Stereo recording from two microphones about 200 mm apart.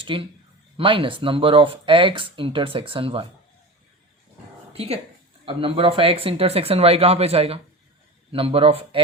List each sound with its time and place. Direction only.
0.0 s speech: 25° right (ahead or behind)
4.7 s a woman's voice: 30° right (ahead or behind)